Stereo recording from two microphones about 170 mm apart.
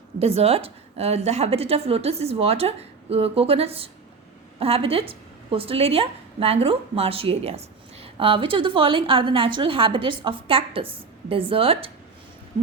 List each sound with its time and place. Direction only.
0.2 s a woman's voice: 35° right (ahead or behind)